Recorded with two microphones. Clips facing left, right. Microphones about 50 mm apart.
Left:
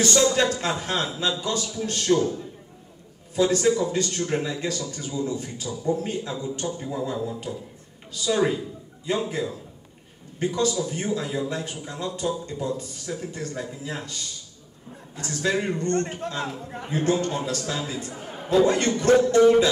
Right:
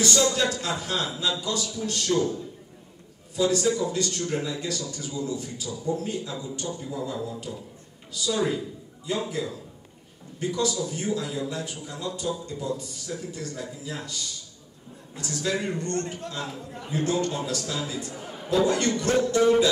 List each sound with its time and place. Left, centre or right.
0.0 s a man's voice: left
16.7 s a man's voice: left